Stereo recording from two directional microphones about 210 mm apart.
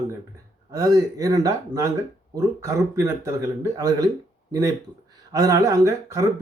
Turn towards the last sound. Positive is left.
turn(degrees=-15)  # may be behind; listen again after turning